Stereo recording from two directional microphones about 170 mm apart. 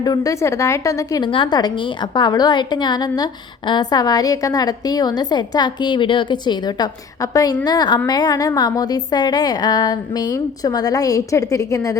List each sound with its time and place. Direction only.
0.0 s a woman's voice: 20° left (ahead or behind)